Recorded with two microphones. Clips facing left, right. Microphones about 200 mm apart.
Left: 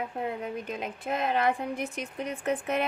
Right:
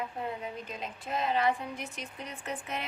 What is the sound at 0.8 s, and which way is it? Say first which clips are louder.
A woman's voice: left 2 dB; 60° left (ahead or behind).